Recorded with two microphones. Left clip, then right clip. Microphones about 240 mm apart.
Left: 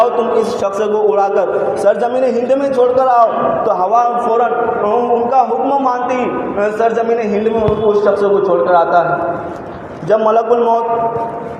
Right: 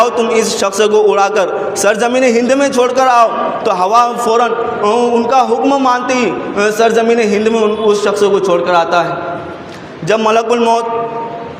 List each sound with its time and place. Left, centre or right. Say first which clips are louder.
0.0 s a man's voice: right 1 dB; right
3.8 s a man's voice: right 5 dB; right
5.3 s a man's voice: right 2 dB; right
6.6 s a man's voice: right 3 dB; right
6.9 s a man's voice: right 4 dB; right
10.1 s a man's voice: even; right